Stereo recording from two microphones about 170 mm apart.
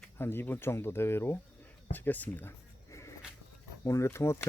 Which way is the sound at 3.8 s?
15° left (ahead or behind).